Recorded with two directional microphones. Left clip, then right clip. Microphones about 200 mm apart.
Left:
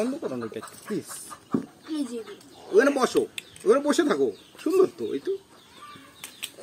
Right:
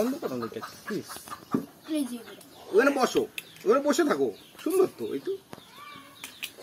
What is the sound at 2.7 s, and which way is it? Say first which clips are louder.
Speech: left 2 dB; 40° left (ahead or behind).